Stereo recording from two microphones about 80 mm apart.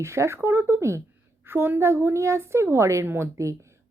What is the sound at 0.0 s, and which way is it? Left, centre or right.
Speech, right.